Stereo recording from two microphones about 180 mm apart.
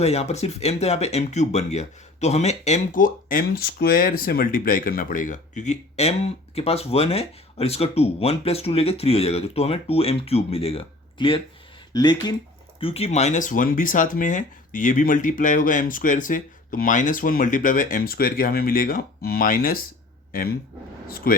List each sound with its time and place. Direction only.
0.0 s speech: 35° left (ahead or behind)
12.8 s speech: 35° left (ahead or behind); by 20.6 s 55° left (ahead or behind)